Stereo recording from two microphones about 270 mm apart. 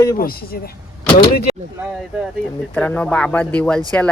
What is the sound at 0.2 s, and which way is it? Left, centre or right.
Speech, left.